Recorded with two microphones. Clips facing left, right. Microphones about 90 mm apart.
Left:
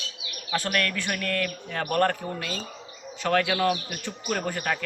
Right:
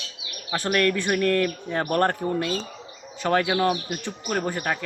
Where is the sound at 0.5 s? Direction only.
25° right (ahead or behind).